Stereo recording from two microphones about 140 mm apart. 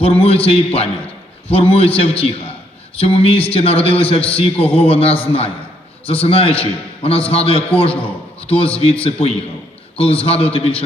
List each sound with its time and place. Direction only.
0.0 s a man's voice: 45° left (ahead or behind)